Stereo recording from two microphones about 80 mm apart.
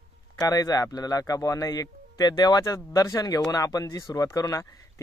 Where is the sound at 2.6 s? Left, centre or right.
Left.